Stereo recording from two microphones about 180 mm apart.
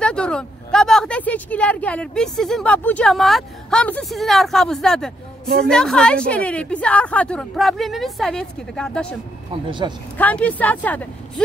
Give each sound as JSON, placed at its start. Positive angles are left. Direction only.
{"t": 0.0, "sound": "a woman's voice", "side_deg": 5}
{"t": 9.7, "sound": "speech", "side_deg": -25}
{"t": 10.1, "sound": "speech", "side_deg": 10}